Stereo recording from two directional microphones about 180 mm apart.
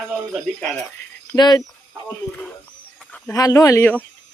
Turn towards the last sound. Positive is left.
turn(degrees=10)  # may be behind; listen again after turning